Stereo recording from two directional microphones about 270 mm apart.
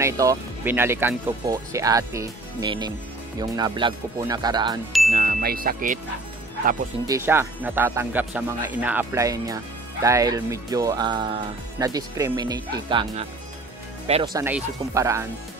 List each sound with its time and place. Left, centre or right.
0.0 s speech: centre
5.1 s speech: right
7.1 s speech: centre
14.0 s speech: centre